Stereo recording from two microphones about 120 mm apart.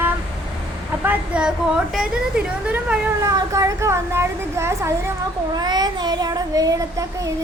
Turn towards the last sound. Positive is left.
turn(degrees=-30)  # may be behind; listen again after turning